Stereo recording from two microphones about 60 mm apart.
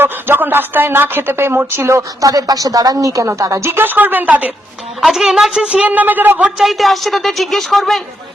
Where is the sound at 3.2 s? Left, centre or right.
Right.